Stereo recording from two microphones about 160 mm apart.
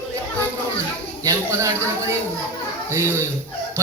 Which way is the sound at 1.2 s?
20° right (ahead or behind).